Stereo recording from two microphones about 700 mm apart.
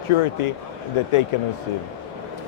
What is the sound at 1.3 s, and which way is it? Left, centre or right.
Speech, left.